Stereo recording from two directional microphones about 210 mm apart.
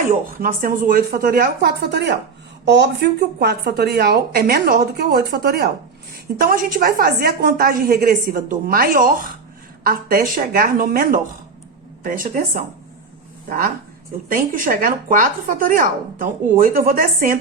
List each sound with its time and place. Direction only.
0.3 s speech: 40° right (ahead or behind)
14.3 s speech: 40° right (ahead or behind)